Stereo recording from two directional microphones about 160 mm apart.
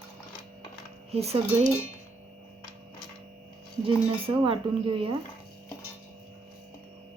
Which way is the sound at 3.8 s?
35° right (ahead or behind).